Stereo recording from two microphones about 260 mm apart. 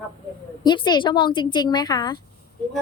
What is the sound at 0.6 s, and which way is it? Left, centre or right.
A woman's voice, centre.